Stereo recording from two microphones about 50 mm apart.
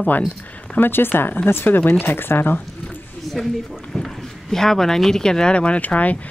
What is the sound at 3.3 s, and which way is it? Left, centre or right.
Speech, centre.